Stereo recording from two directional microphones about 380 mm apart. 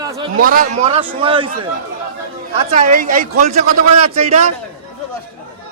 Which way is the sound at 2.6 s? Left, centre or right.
Centre.